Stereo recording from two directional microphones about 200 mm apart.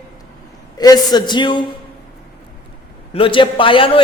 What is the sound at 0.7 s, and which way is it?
Speech, 20° left (ahead or behind).